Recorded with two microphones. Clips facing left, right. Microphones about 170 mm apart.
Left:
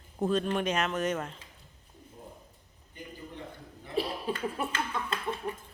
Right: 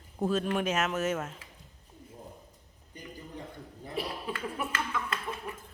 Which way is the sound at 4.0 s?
30° left (ahead or behind).